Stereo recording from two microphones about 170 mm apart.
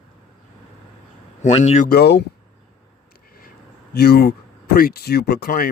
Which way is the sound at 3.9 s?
70° left (ahead or behind).